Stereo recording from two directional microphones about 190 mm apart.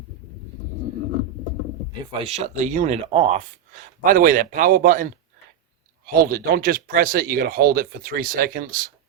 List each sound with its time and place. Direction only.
2.2 s speech: 35° right (ahead or behind)
4.0 s speech: 45° right (ahead or behind)
6.3 s speech: 50° right (ahead or behind)